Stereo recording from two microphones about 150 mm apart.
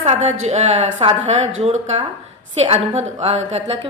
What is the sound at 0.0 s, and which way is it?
A woman's voice, 50° right (ahead or behind).